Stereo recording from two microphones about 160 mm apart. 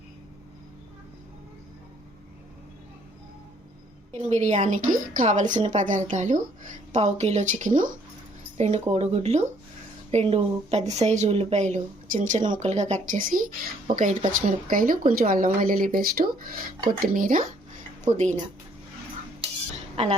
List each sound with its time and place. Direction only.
4.1 s a woman's voice: 45° right (ahead or behind)